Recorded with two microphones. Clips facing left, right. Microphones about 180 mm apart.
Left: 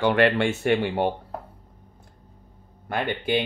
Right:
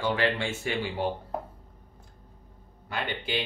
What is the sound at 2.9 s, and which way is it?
Speech, 55° left (ahead or behind).